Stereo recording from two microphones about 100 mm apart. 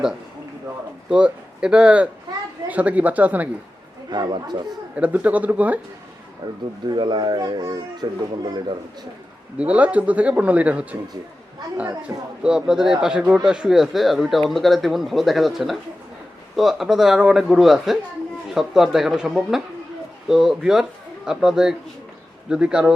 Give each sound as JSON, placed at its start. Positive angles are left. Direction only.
{"t": 1.1, "sound": "speech", "side_deg": -10}
{"t": 4.1, "sound": "speech", "side_deg": -50}
{"t": 4.9, "sound": "speech", "side_deg": -15}
{"t": 6.4, "sound": "speech", "side_deg": -45}
{"t": 9.6, "sound": "speech", "side_deg": -15}